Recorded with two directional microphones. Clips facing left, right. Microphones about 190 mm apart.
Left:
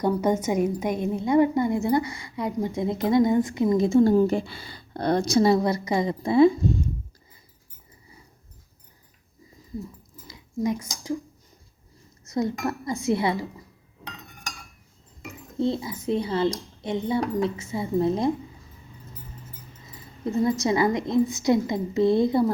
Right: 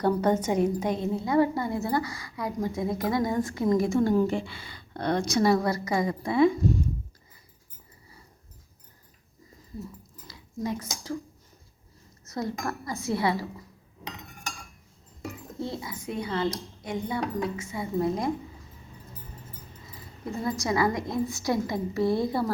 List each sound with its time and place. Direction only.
0.0 s a woman's voice: 10° left (ahead or behind); by 6.6 s 30° left (ahead or behind)
10.2 s dishes: 15° left (ahead or behind)
12.3 s a woman's voice: 20° left (ahead or behind)
15.5 s a woman's voice: 25° left (ahead or behind)
20.4 s a woman's voice: 20° left (ahead or behind)